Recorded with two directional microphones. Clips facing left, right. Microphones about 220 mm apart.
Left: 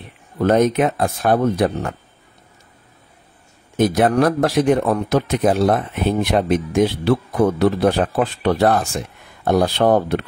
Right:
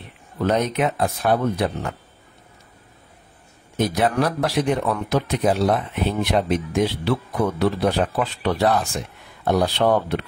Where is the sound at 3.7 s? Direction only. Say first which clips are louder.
Left 5 dB; 50° left (ahead or behind).